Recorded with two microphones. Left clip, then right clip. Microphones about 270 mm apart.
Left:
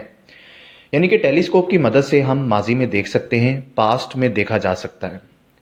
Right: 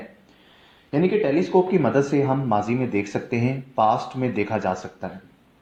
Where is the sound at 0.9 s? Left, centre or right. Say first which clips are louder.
Left 6 dB; left.